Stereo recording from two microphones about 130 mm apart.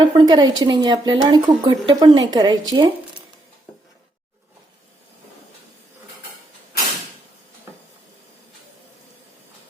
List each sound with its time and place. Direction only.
0.0 s a woman's voice: 35° right (ahead or behind)